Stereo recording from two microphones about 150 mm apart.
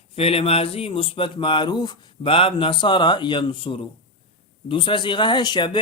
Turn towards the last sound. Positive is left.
turn(degrees=30)  # may be behind; listen again after turning